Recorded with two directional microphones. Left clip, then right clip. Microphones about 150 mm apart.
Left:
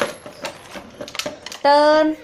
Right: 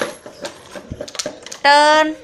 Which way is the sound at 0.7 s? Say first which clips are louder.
Right 2 dB; 25° right (ahead or behind).